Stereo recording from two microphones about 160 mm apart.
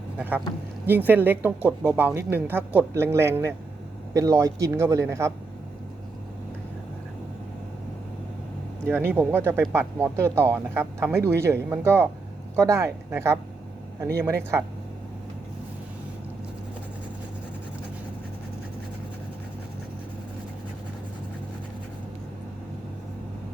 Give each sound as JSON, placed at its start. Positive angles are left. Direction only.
{"t": 0.2, "sound": "a man's voice", "side_deg": -10}
{"t": 8.9, "sound": "speech", "side_deg": -15}